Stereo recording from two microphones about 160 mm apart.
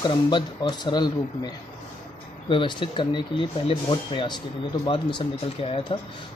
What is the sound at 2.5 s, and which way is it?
Speech, 30° left (ahead or behind).